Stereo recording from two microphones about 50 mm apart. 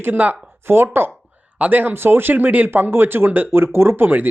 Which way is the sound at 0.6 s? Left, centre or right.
Right.